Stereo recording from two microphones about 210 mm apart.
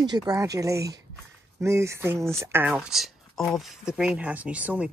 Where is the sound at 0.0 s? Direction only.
20° right (ahead or behind).